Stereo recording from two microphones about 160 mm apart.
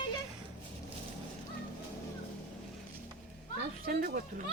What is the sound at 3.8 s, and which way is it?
Speech, 65° right (ahead or behind).